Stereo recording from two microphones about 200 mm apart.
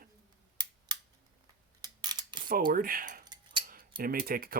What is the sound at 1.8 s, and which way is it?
Scissors, 20° right (ahead or behind).